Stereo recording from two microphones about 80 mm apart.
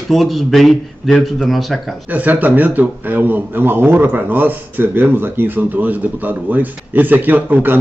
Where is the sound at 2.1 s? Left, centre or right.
Right.